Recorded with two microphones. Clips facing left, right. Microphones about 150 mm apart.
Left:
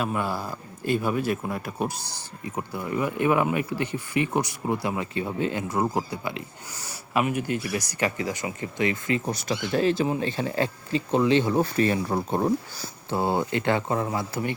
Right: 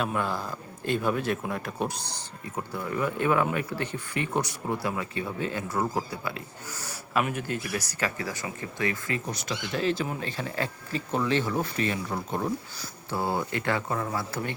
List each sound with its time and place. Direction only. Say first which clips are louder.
0.0 s speech: left 1 dB; 5° left (ahead or behind)
4.9 s speech: left 4 dB; 25° left (ahead or behind)
5.6 s a man's voice: left 3 dB; 15° left (ahead or behind)
9.2 s speech: left 5 dB; 35° left (ahead or behind)
11.6 s speech: left 6 dB; 35° left (ahead or behind); by 14.5 s 15° left (ahead or behind)